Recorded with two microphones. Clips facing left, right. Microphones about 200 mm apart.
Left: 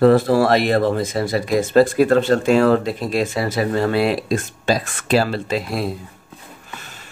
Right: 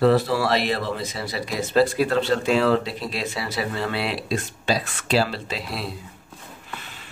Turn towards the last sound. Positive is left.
turn(degrees=50)  # may be behind; listen again after turning